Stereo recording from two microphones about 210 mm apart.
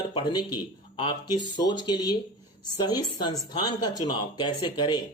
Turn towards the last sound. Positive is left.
turn(degrees=20)  # may be behind; listen again after turning